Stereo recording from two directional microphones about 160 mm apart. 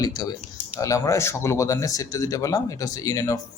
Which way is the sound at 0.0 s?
25° left (ahead or behind).